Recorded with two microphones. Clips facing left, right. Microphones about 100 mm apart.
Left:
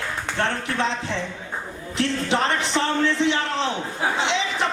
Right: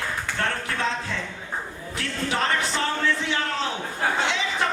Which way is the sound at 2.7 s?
20° left (ahead or behind).